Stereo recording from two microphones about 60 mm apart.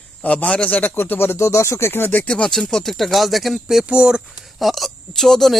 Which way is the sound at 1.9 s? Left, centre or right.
Left.